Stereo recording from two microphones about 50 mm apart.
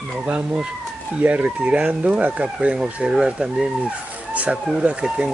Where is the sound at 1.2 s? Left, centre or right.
Right.